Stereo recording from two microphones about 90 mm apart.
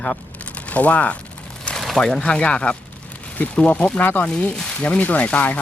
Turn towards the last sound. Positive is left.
turn(degrees=15)  # may be behind; listen again after turning